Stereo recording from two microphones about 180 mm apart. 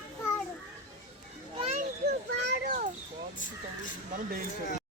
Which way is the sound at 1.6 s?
35° right (ahead or behind).